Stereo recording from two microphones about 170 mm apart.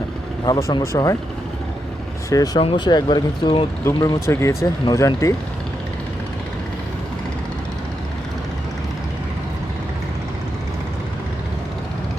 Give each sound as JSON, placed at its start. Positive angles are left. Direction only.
{"t": 0.4, "sound": "speech", "side_deg": 25}
{"t": 2.3, "sound": "speech", "side_deg": 20}